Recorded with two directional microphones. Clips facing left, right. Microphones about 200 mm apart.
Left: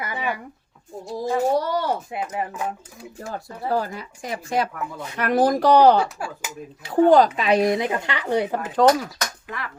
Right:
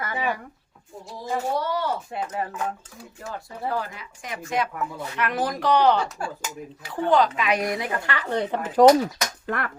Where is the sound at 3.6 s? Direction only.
35° left (ahead or behind).